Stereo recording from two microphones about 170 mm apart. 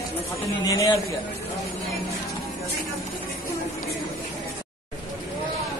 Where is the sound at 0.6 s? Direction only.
20° left (ahead or behind).